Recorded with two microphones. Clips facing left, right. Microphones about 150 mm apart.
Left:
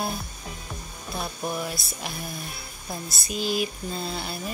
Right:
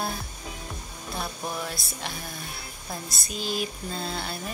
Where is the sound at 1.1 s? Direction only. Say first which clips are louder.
Left 2 dB; 10° left (ahead or behind).